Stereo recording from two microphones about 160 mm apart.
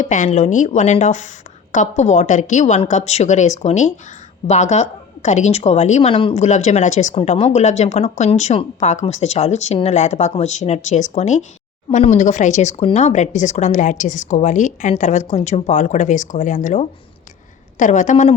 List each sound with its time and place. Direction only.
0.0 s a woman's voice: 50° left (ahead or behind)